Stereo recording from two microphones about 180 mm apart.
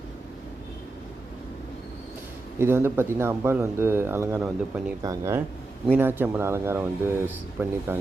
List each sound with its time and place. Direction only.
2.6 s speech: 15° right (ahead or behind)